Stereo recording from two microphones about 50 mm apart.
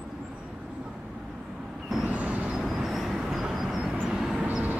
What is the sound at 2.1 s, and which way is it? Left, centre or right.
Vehicle, right.